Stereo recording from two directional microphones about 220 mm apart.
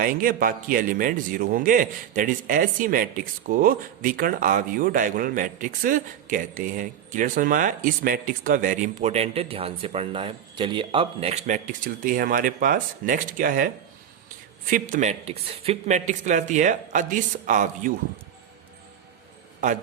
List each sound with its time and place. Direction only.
0.0 s a man's voice: 40° right (ahead or behind)
14.7 s a man's voice: 35° right (ahead or behind)